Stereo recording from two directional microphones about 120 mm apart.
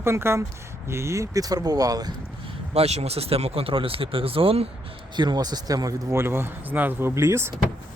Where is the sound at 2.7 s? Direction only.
60° right (ahead or behind).